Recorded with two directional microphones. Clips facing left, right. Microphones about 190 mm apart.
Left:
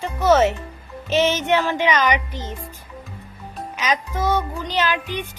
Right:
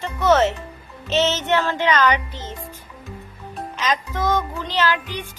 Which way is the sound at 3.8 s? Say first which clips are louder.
Even; 10° left (ahead or behind).